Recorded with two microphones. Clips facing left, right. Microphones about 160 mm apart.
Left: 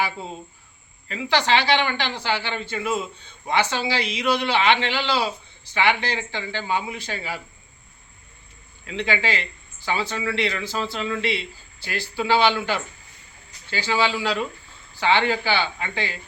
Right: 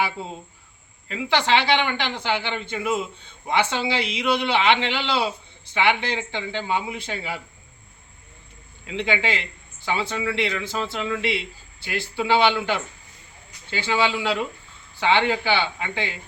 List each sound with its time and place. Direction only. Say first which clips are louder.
1.0 s a man's voice: even; 15° right (ahead or behind)
8.9 s a man's voice: even; 20° right (ahead or behind)